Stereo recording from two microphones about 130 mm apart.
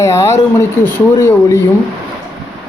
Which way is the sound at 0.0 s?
20° left (ahead or behind).